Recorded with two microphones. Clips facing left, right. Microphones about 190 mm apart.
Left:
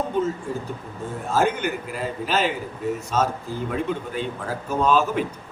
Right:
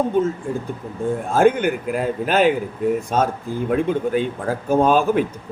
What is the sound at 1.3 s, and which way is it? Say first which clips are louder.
Speech: right 6 dB; 55° right (ahead or behind).